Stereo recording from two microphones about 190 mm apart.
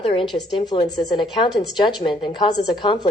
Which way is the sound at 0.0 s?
30° left (ahead or behind).